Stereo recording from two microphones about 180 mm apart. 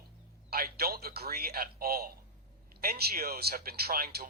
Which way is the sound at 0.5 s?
55° right (ahead or behind).